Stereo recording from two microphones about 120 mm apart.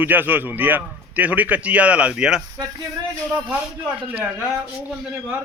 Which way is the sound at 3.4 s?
15° right (ahead or behind).